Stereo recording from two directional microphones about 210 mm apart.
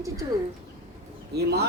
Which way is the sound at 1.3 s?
50° right (ahead or behind).